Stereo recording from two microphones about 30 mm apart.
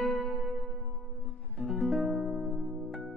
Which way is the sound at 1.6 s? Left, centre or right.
Centre.